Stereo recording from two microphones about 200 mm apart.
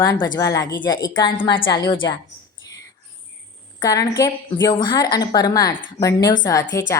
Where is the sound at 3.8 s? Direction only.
20° left (ahead or behind).